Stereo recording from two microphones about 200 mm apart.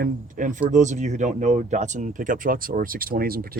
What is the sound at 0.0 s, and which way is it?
Speech, 40° right (ahead or behind).